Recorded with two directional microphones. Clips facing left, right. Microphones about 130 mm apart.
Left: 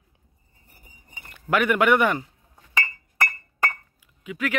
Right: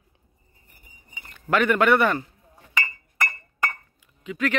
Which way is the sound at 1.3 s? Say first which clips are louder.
Right 1 dB; 10° left (ahead or behind).